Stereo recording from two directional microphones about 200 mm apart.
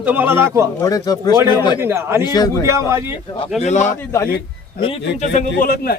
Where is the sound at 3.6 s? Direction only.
35° left (ahead or behind).